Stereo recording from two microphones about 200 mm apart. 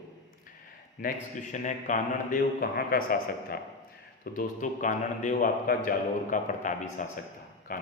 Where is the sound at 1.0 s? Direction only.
40° left (ahead or behind).